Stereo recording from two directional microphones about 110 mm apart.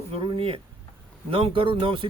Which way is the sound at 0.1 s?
55° right (ahead or behind).